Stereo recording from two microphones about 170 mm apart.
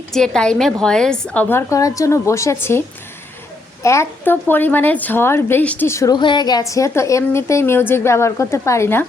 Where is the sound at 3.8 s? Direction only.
15° left (ahead or behind).